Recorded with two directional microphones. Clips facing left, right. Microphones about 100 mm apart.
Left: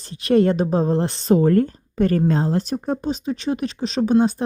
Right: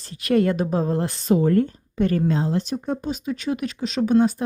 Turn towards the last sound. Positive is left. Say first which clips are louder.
# left 1 dB
turn(degrees=25)  # may be behind; listen again after turning